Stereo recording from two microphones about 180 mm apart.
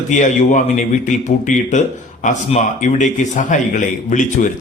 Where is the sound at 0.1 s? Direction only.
45° left (ahead or behind).